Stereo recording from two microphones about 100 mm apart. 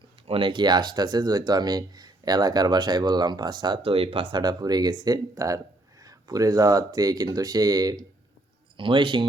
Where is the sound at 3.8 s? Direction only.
70° right (ahead or behind).